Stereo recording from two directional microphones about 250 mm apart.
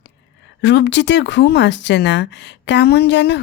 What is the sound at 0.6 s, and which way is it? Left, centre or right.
Speech, left.